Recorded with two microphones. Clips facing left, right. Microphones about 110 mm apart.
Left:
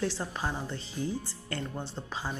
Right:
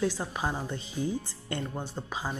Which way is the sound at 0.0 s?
10° right (ahead or behind).